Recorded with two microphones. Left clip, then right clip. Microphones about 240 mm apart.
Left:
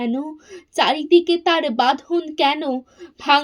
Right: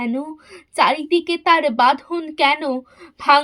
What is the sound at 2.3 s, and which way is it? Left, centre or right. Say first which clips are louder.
Speech: right 3 dB; centre.